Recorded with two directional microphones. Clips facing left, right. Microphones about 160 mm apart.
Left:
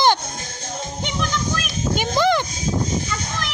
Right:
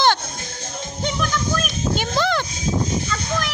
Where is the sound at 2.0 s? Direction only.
15° left (ahead or behind).